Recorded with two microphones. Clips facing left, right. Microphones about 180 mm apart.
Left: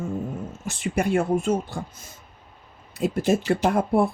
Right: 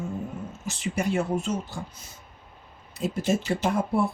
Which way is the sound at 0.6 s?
55° left (ahead or behind).